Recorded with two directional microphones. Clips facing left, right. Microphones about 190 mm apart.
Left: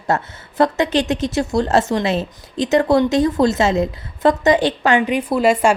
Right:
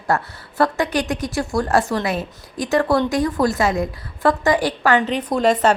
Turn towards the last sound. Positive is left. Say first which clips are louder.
# left 2 dB
turn(degrees=10)  # may be behind; listen again after turning